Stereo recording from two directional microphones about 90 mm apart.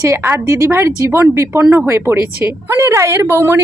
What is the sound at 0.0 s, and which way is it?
A woman's voice, 30° right (ahead or behind).